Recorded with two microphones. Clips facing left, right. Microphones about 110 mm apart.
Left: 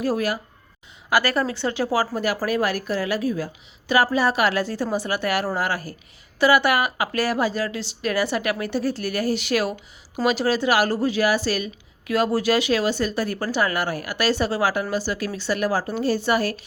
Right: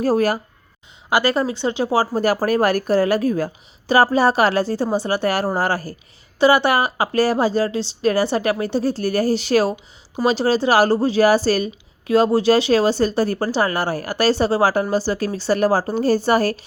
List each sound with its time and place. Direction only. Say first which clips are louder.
0.0 s a woman's voice: right 6 dB; 40° right (ahead or behind)
1.1 s a woman's voice: right 3 dB; 20° right (ahead or behind); by 3.5 s 50° right (ahead or behind)
3.8 s a woman's voice: right 5 dB; 35° right (ahead or behind)